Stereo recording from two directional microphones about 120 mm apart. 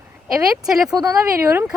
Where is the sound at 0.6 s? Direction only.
5° right (ahead or behind).